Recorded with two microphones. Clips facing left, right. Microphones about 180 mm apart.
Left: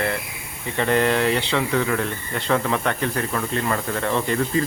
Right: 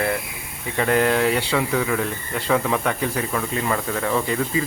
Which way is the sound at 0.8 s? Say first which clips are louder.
Right 1 dB; 5° right (ahead or behind).